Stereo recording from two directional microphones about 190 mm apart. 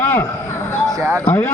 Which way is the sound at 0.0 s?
10° left (ahead or behind).